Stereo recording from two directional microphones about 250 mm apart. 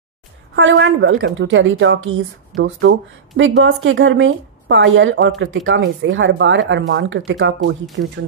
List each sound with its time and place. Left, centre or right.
0.6 s a woman's voice: right